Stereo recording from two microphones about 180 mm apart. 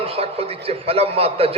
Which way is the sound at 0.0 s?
35° right (ahead or behind).